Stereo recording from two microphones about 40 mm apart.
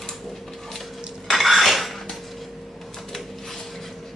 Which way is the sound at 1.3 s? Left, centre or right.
Centre.